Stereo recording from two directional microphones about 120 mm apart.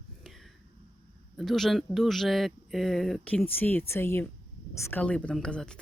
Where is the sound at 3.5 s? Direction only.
15° left (ahead or behind).